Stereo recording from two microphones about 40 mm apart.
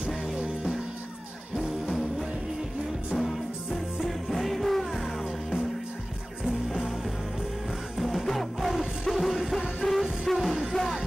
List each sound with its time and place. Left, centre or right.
1.9 s music: centre
6.4 s music: centre
8.0 s music: centre